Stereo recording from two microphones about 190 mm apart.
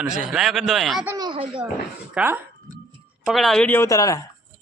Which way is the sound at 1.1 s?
25° right (ahead or behind).